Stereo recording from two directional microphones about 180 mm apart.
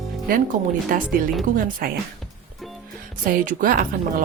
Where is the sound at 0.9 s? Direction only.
50° right (ahead or behind).